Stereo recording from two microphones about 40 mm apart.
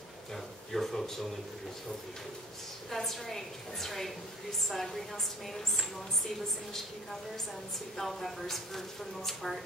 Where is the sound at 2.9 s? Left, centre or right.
Centre.